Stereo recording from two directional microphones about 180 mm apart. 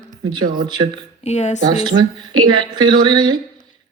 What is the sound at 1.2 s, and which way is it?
Speech, 40° left (ahead or behind).